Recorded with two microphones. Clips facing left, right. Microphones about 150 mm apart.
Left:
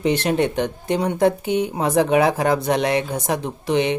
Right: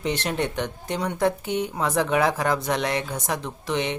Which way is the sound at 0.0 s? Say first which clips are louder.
Left 7 dB; 15° left (ahead or behind).